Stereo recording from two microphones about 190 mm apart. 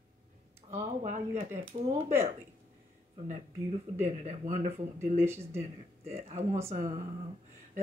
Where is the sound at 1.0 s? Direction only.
40° right (ahead or behind).